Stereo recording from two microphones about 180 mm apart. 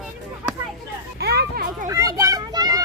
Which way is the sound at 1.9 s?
20° right (ahead or behind).